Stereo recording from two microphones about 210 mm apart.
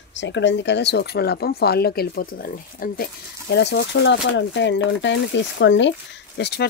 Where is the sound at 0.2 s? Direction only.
60° left (ahead or behind).